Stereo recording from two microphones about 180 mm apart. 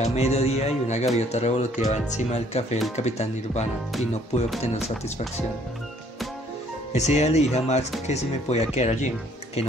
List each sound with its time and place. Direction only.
0.0 s speech: 35° left (ahead or behind)
6.9 s speech: 40° left (ahead or behind)